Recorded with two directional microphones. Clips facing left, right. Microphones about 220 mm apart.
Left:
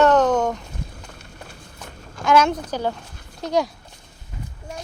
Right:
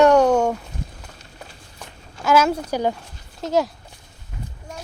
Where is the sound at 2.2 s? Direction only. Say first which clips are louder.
Even; 5° right (ahead or behind).